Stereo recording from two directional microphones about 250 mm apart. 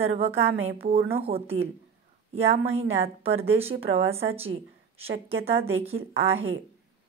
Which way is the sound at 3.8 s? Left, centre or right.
Right.